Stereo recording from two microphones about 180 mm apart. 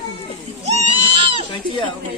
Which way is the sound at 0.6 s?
35° right (ahead or behind).